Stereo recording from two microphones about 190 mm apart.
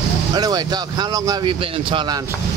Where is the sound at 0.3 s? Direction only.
20° right (ahead or behind).